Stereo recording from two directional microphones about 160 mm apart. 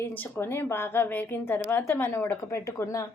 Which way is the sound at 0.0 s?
15° left (ahead or behind).